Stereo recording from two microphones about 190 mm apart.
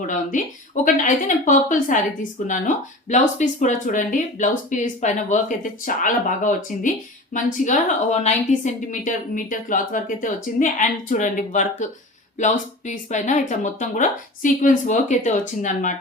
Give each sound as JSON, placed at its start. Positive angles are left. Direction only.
{"t": 0.1, "sound": "a woman's voice", "side_deg": 45}